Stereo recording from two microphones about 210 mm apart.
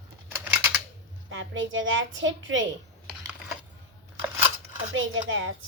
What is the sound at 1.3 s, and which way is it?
A woman's voice, 65° right (ahead or behind).